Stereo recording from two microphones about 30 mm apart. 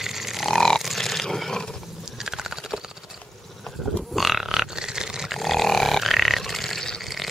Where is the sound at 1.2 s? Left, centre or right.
Centre.